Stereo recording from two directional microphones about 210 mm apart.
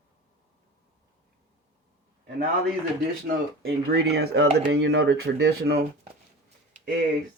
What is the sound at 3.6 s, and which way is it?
Speech, 50° right (ahead or behind).